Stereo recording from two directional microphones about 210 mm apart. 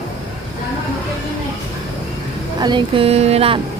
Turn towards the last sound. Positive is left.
turn(degrees=-30)  # may be behind; listen again after turning